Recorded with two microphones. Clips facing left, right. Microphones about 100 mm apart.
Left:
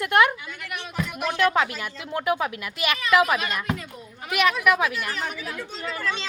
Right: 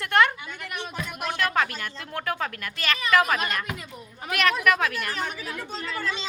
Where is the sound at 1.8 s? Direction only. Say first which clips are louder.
Left 3 dB; 10° left (ahead or behind).